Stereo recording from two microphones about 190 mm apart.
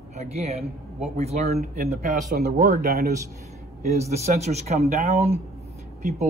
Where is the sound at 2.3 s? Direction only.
55° right (ahead or behind).